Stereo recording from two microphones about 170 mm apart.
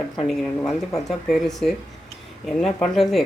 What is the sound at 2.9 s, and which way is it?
Speech, centre (ahead or behind).